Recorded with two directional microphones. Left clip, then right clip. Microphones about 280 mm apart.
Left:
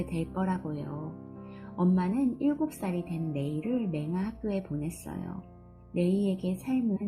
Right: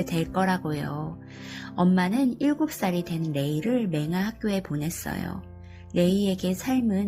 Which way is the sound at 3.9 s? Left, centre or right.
Centre.